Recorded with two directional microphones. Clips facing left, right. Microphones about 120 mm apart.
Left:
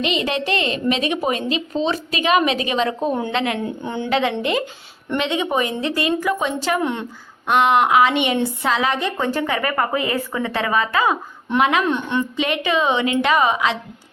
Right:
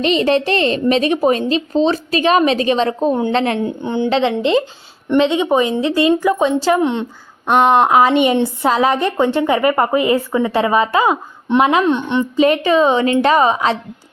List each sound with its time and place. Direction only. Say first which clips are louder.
0.0 s a woman's voice: right 7 dB; 35° right (ahead or behind)
3.8 s a woman's voice: right 5 dB; 20° right (ahead or behind); by 9.1 s 45° right (ahead or behind)
9.1 s a woman's voice: right 7 dB; 25° right (ahead or behind)
12.4 s a woman's voice: right 10 dB; 35° right (ahead or behind)